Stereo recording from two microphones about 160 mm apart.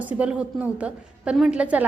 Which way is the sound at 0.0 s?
10° right (ahead or behind).